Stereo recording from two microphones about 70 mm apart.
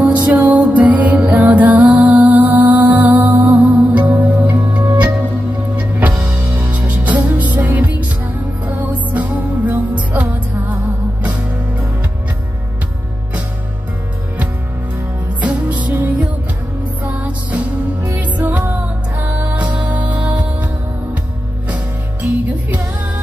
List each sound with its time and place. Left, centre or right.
0.0 s music: centre
5.8 s music: right
15.4 s music: right
18.2 s music: right
22.2 s music: right